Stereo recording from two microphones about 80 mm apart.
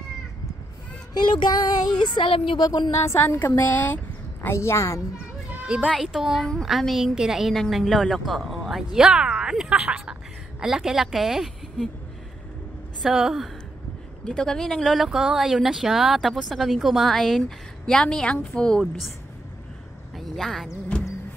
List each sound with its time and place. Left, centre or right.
1.1 s child singing: left
2.1 s a woman's voice: left
2.6 s a woman's voice: left
3.1 s a woman's voice: left
5.5 s children playing: centre
5.9 s speech: centre
6.4 s a woman's voice: centre
13.0 s speech: centre
14.2 s speech: centre
20.2 s a sound: centre